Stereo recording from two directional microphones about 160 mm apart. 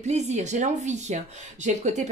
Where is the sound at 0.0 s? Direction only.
45° right (ahead or behind).